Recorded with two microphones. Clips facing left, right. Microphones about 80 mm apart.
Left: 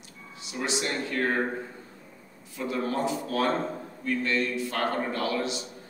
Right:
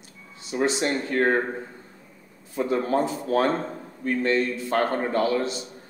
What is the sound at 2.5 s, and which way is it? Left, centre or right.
A man's voice, right.